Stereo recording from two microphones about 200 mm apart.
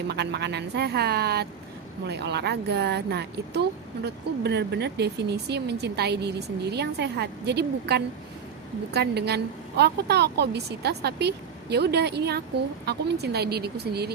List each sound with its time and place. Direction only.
0.1 s speech: 55° right (ahead or behind)